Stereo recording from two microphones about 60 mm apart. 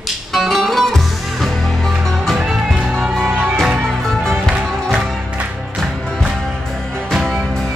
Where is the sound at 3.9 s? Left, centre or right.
Centre.